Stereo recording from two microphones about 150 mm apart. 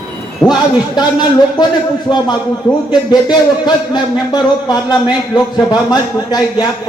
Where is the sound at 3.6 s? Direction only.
30° left (ahead or behind).